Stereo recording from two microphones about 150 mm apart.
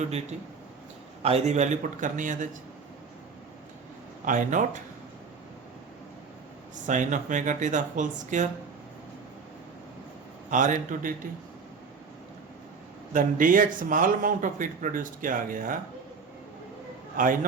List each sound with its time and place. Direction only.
1.2 s a man's voice: 45° right (ahead or behind)
4.3 s speech: 60° right (ahead or behind)
6.8 s speech: 55° right (ahead or behind)
10.5 s speech: 60° right (ahead or behind)
13.1 s speech: 65° right (ahead or behind)
17.2 s speech: 65° right (ahead or behind)